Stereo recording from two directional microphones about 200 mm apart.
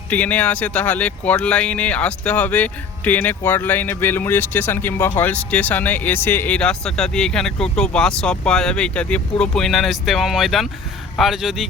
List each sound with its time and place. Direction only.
0.1 s speech: 10° left (ahead or behind)